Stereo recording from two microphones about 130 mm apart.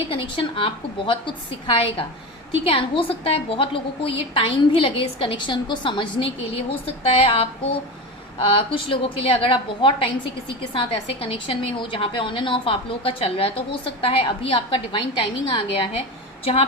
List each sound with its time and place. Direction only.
0.1 s a woman's voice: 45° left (ahead or behind)